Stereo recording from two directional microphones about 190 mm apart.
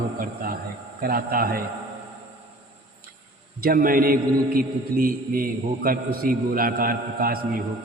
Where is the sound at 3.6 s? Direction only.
50° right (ahead or behind).